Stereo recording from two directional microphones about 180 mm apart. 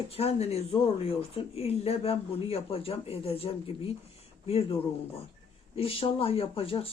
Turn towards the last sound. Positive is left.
turn(degrees=30)  # may be behind; listen again after turning